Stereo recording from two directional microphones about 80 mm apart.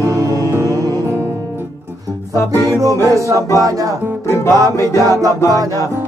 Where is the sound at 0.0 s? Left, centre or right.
Right.